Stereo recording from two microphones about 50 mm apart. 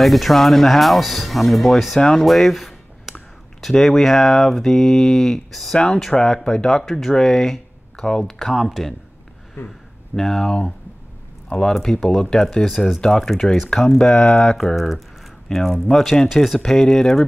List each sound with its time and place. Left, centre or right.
0.0 s speech: centre
2.0 s speech: centre
2.2 s a sound: centre
3.6 s speech: centre
8.5 s speech: centre
9.6 s speech: left
10.1 s speech: centre
11.7 s speech: centre